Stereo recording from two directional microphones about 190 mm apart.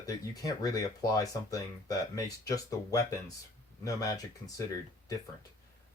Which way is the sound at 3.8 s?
15° left (ahead or behind).